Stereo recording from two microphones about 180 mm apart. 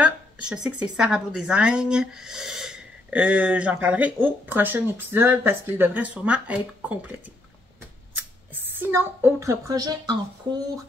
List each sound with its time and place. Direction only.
0.0 s speech: 5° right (ahead or behind)
8.5 s a sound: 10° right (ahead or behind)
8.9 s speech: 15° right (ahead or behind)